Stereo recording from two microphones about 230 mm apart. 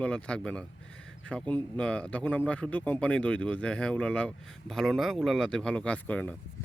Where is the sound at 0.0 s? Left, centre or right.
Centre.